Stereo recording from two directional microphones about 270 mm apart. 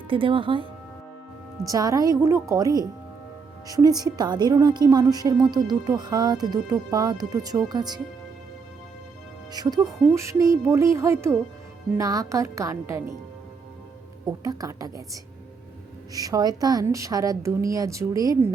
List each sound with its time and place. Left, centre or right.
0.1 s a woman's voice: centre
9.5 s a woman's voice: centre
14.3 s a woman's voice: centre